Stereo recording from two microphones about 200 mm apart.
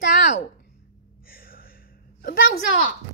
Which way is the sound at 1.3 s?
45° left (ahead or behind).